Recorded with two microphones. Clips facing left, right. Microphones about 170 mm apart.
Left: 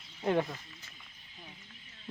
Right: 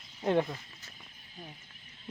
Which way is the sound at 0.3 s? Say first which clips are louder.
Right 2 dB; 10° right (ahead or behind).